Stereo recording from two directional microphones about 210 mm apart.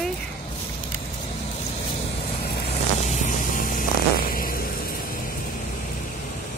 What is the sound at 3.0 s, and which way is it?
Vehicle, 35° left (ahead or behind).